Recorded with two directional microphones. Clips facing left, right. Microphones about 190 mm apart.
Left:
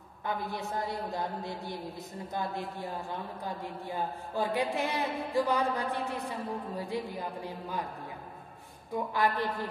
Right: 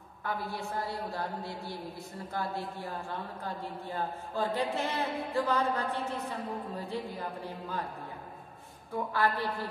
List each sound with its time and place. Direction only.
0.2 s a woman's voice: 20° left (ahead or behind)
8.9 s a woman's voice: 15° left (ahead or behind)